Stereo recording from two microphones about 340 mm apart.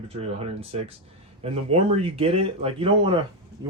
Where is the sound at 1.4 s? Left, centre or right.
Centre.